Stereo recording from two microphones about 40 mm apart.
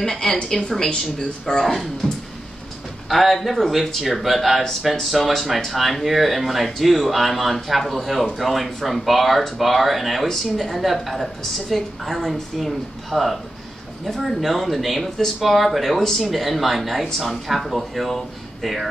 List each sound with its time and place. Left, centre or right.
0.0 s a woman's voice: centre
3.1 s a woman's voice: centre